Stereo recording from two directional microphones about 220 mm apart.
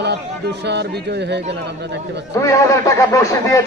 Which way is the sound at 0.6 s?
50° right (ahead or behind).